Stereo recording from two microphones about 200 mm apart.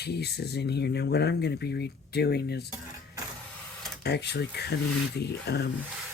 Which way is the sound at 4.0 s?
55° left (ahead or behind).